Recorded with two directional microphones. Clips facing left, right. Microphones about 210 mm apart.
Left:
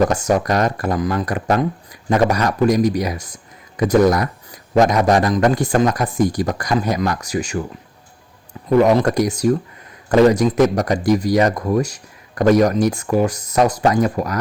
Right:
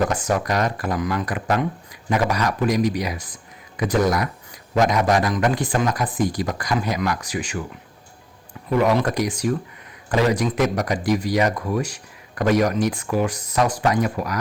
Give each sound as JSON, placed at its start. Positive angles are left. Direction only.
{"t": 0.1, "sound": "speech", "side_deg": 40}
{"t": 8.8, "sound": "speech", "side_deg": 45}